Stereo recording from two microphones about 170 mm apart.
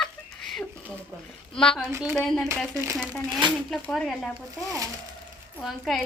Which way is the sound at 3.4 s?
30° right (ahead or behind).